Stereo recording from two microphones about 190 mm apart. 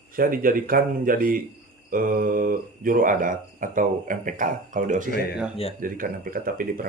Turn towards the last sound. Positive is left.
turn(degrees=-45)  # may be behind; listen again after turning